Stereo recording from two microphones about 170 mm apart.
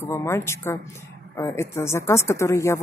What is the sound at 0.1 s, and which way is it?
Speech, 15° left (ahead or behind).